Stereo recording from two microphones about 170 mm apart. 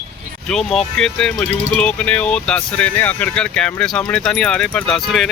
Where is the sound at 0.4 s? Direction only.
5° left (ahead or behind).